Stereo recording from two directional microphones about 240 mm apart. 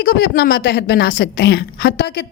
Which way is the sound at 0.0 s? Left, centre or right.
Left.